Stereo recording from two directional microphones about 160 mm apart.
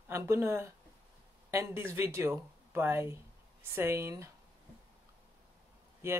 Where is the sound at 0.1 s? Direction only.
15° right (ahead or behind).